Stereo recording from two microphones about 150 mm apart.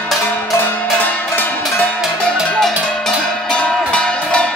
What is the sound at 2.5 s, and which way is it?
Music, 5° left (ahead or behind).